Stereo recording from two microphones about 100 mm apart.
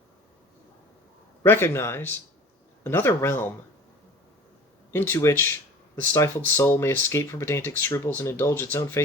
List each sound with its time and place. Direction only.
1.5 s speech: 25° left (ahead or behind)
4.9 s speech: 25° left (ahead or behind)